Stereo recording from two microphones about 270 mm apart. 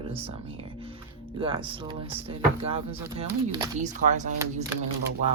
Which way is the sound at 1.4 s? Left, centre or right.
Centre.